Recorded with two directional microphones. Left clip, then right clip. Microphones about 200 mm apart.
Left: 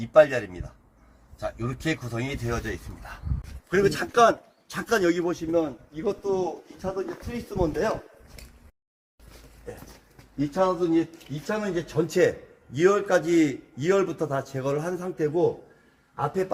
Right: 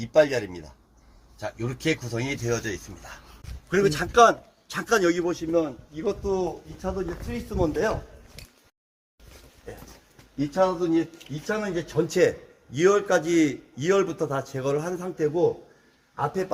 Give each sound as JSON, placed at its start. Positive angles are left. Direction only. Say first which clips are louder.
{"t": 0.1, "sound": "a man's voice", "louder": "left 2 dB", "side_deg": -15}
{"t": 6.8, "sound": "speech", "louder": "even", "side_deg": -25}
{"t": 10.3, "sound": "a man's voice", "louder": "right 1 dB", "side_deg": -15}